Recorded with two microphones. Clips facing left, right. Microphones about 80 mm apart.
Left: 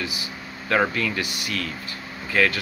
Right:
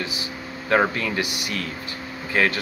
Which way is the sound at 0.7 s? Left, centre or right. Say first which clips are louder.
Right 2 dB; right.